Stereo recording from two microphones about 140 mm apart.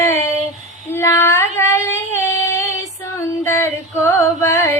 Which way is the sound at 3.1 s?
20° left (ahead or behind).